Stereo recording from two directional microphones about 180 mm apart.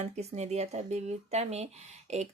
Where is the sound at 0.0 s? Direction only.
35° right (ahead or behind).